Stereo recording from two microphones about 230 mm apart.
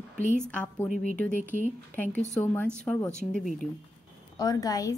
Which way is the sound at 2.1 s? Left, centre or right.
Left.